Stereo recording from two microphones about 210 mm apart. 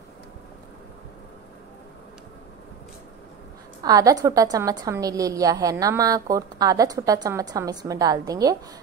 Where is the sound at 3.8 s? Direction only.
15° right (ahead or behind).